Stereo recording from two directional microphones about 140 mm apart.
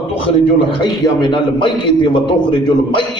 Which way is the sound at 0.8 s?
30° left (ahead or behind).